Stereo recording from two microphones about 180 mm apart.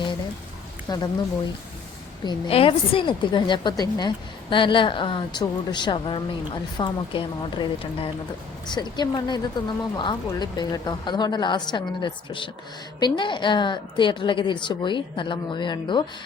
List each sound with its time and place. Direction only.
0.9 s a woman's voice: 20° left (ahead or behind)
2.2 s a woman's voice: 30° left (ahead or behind)